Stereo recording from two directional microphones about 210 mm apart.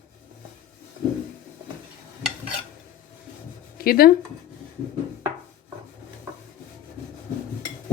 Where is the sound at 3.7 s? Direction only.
45° left (ahead or behind).